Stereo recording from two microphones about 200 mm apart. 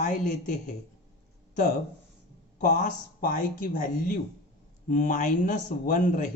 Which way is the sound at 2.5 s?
40° left (ahead or behind).